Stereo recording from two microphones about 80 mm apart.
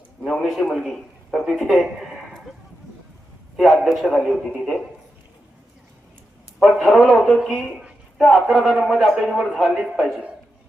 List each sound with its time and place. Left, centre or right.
0.2 s a man's voice: centre
3.6 s a man's voice: centre
6.6 s a man's voice: centre